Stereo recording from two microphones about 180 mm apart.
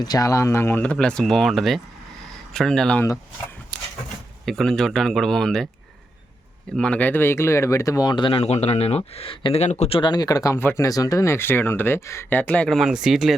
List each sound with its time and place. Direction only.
0.0 s speech: 20° left (ahead or behind); by 3.1 s 5° left (ahead or behind)
4.4 s speech: centre (ahead or behind)
6.7 s speech: 5° left (ahead or behind)